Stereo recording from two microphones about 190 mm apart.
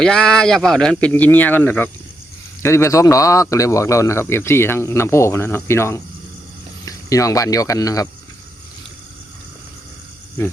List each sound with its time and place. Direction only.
0.0 s speech: 5° left (ahead or behind)